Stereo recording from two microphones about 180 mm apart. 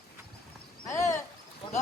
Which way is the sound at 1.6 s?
30° left (ahead or behind).